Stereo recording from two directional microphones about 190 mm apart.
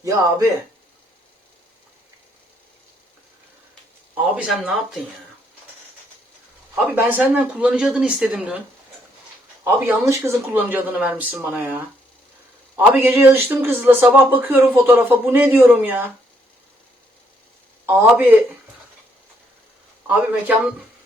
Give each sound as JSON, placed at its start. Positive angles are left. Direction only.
{"t": 0.0, "sound": "speech", "side_deg": -15}
{"t": 4.2, "sound": "speech", "side_deg": -5}
{"t": 6.9, "sound": "speech", "side_deg": -10}
{"t": 9.6, "sound": "speech", "side_deg": -15}
{"t": 17.8, "sound": "speech", "side_deg": -10}